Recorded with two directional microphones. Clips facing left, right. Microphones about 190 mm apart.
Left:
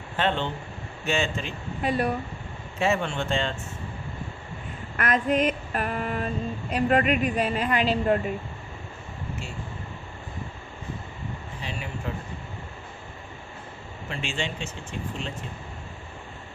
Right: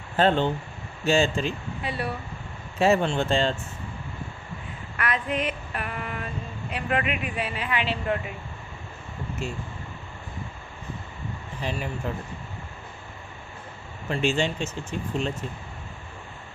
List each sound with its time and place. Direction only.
0.2 s speech: 40° right (ahead or behind)
1.8 s speech: 50° left (ahead or behind)
2.7 s speech: 35° right (ahead or behind)
4.9 s female singing: 45° left (ahead or behind)
14.1 s speech: 40° right (ahead or behind)